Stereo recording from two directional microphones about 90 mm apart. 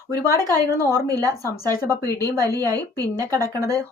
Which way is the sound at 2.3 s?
45° right (ahead or behind).